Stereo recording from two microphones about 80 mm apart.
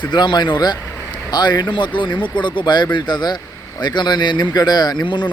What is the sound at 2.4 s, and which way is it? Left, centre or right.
Speech, left.